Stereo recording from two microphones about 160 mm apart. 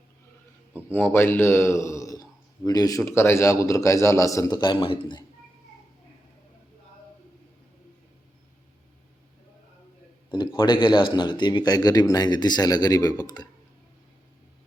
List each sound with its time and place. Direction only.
0.9 s a man's voice: 15° left (ahead or behind); by 5.2 s 30° left (ahead or behind)
10.6 s a man's voice: 30° left (ahead or behind)